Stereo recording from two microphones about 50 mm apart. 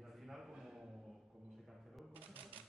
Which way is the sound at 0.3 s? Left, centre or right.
Centre.